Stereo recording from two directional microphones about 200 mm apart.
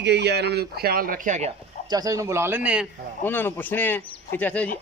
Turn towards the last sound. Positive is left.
turn(degrees=10)  # may be behind; listen again after turning